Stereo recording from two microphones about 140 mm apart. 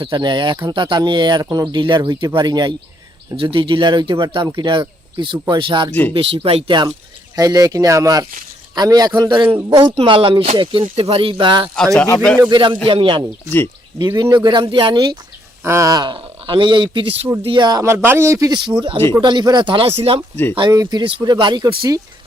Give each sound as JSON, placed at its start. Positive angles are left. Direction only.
{"t": 0.0, "sound": "speech", "side_deg": -30}
{"t": 5.9, "sound": "speech", "side_deg": 10}
{"t": 6.1, "sound": "speech", "side_deg": -40}
{"t": 9.9, "sound": "speech", "side_deg": -40}
{"t": 15.6, "sound": "speech", "side_deg": -20}
{"t": 20.3, "sound": "speech", "side_deg": 15}
{"t": 20.6, "sound": "speech", "side_deg": -30}